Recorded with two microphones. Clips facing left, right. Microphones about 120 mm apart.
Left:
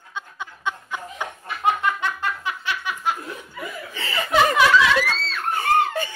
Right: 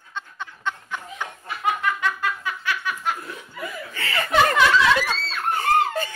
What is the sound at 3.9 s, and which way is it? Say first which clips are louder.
Chuckle: even; 20° left (ahead or behind).